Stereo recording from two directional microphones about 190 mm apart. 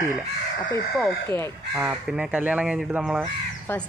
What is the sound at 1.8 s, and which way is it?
Speech, 5° right (ahead or behind).